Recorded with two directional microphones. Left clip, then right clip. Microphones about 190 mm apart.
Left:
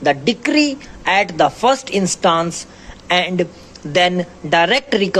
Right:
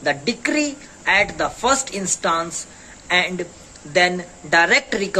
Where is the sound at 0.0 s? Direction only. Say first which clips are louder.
Left 5 dB; 30° left (ahead or behind).